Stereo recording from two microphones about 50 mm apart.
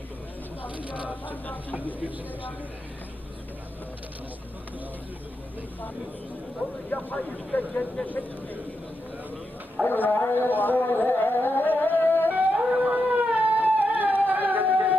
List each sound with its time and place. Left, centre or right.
0.9 s a sound: right
1.3 s speech: left
6.9 s speech: left
8.0 s speech: centre
9.8 s music: left
12.3 s a sound: right